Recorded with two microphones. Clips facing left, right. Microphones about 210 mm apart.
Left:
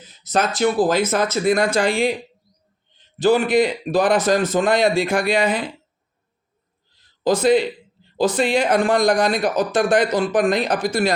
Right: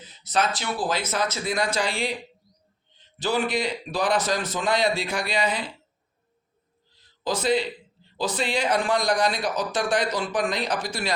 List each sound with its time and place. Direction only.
0.1 s a man's voice: 45° left (ahead or behind)
3.2 s a man's voice: 50° left (ahead or behind)
7.3 s a man's voice: 50° left (ahead or behind)